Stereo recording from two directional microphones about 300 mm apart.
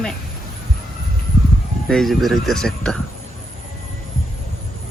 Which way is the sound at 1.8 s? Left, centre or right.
Centre.